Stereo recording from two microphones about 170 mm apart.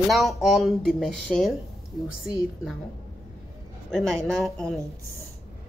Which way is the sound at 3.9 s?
Centre (ahead or behind).